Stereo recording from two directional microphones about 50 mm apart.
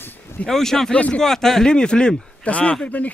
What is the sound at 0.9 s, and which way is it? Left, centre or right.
Speech, left.